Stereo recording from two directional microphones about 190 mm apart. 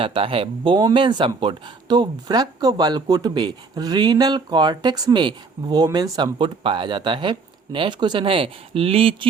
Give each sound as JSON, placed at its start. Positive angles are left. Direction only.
{"t": 0.0, "sound": "speech", "side_deg": -30}